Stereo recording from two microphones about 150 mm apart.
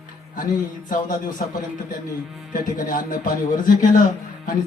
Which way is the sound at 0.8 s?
65° left (ahead or behind).